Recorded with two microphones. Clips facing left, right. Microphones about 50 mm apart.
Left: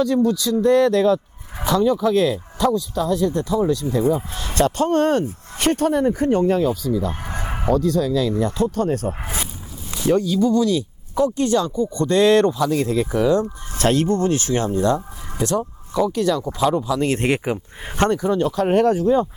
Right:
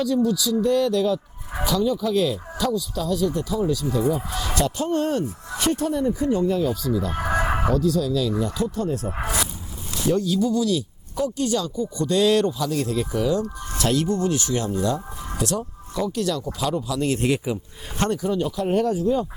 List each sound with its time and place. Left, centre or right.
0.0 s speech: left
6.8 s speech: right
7.2 s a sound: right
7.7 s speech: left
9.2 s zipper: left
10.1 s speech: left
18.3 s speech: left